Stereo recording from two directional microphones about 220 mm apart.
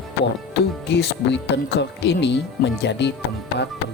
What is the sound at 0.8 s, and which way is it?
Speech, 50° left (ahead or behind).